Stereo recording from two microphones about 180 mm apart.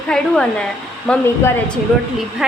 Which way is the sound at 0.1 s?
5° left (ahead or behind).